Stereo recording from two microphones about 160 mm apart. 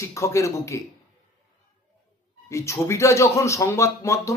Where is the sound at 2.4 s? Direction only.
20° left (ahead or behind).